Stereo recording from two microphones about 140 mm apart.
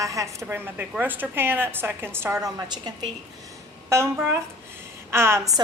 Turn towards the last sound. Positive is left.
turn(degrees=-20)  # may be behind; listen again after turning